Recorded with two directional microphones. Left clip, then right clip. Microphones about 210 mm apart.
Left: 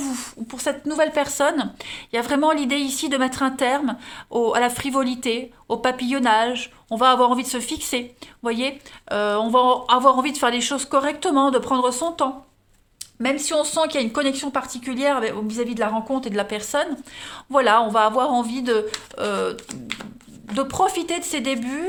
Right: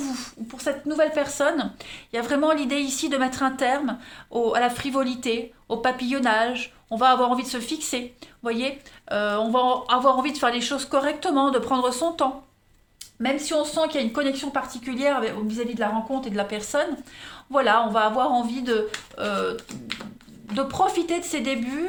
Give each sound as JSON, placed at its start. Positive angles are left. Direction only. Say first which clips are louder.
{"t": 0.0, "sound": "speech", "louder": "left 2 dB", "side_deg": 35}
{"t": 13.2, "sound": "speech", "louder": "left 2 dB", "side_deg": 45}